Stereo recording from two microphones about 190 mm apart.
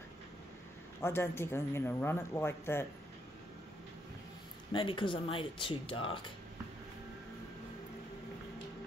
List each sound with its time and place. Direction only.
1.0 s speech: 15° left (ahead or behind)
4.7 s speech: 25° left (ahead or behind)